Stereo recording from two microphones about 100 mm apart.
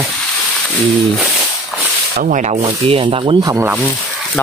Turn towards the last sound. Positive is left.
turn(degrees=-60)  # may be behind; listen again after turning